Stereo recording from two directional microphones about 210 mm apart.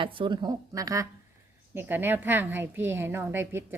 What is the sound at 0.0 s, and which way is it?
A woman's voice, 25° right (ahead or behind).